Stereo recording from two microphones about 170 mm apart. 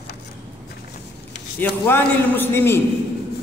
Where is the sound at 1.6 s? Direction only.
10° left (ahead or behind).